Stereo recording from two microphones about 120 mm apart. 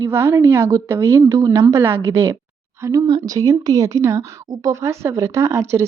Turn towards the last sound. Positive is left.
turn(degrees=-25)  # may be behind; listen again after turning